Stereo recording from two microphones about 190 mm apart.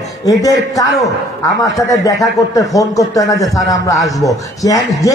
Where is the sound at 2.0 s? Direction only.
20° left (ahead or behind).